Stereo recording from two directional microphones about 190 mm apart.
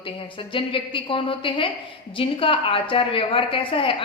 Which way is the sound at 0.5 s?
25° left (ahead or behind).